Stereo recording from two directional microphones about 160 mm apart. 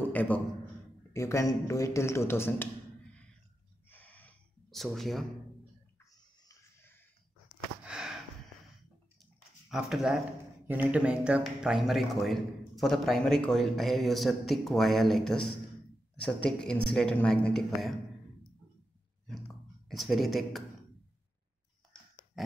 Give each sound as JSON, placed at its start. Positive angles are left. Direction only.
{"t": 0.0, "sound": "a sound", "side_deg": 10}
{"t": 1.1, "sound": "a man's voice", "side_deg": 20}
{"t": 3.9, "sound": "gasp", "side_deg": 10}
{"t": 6.4, "sound": "cricket", "side_deg": 20}
{"t": 7.8, "sound": "sniff", "side_deg": -5}
{"t": 9.2, "sound": "a sound", "side_deg": -5}
{"t": 10.7, "sound": "speech", "side_deg": -10}
{"t": 19.9, "sound": "speech", "side_deg": 0}